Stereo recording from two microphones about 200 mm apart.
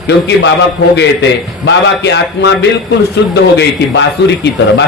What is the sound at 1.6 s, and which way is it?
A man's voice, 60° left (ahead or behind).